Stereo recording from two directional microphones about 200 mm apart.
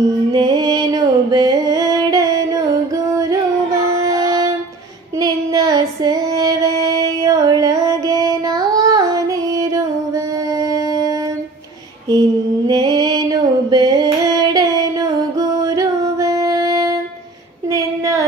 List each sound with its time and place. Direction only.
0.3 s music: 20° right (ahead or behind)
4.0 s music: 20° right (ahead or behind)
5.2 s child singing: 15° right (ahead or behind)
12.1 s mantra: 20° right (ahead or behind)
17.6 s a sound: 15° right (ahead or behind)